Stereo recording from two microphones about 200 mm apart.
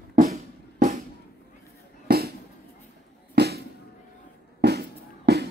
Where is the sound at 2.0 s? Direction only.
50° right (ahead or behind).